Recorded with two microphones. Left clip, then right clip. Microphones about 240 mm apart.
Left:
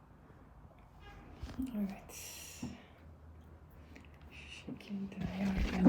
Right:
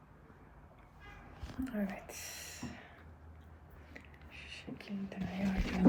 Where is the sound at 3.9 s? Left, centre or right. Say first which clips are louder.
Right 3 dB; centre.